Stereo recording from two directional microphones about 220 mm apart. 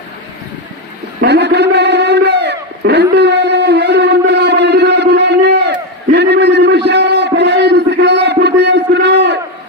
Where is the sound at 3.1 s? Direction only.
50° right (ahead or behind).